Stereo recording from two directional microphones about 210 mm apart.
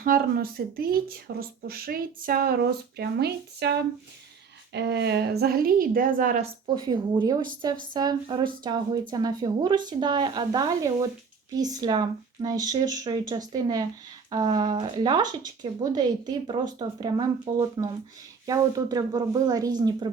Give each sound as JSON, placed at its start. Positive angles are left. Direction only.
{"t": 0.0, "sound": "speech", "side_deg": -45}
{"t": 6.7, "sound": "a woman's voice", "side_deg": -20}